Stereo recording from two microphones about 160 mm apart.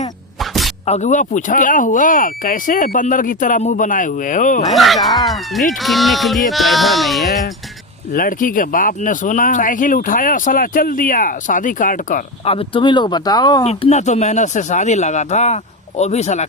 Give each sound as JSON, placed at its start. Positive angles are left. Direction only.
{"t": 0.3, "sound": "a sound", "side_deg": 0}
{"t": 0.9, "sound": "speech", "side_deg": 45}
{"t": 4.7, "sound": "speech", "side_deg": 0}
{"t": 8.1, "sound": "speech", "side_deg": 60}
{"t": 12.5, "sound": "speech", "side_deg": 35}
{"t": 13.7, "sound": "speech", "side_deg": 45}